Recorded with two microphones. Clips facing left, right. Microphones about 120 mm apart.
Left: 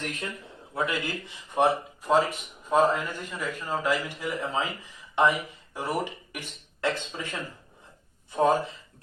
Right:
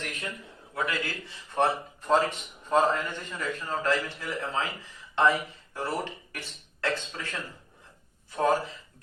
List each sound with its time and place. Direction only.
0.7 s a man's voice: 20° left (ahead or behind)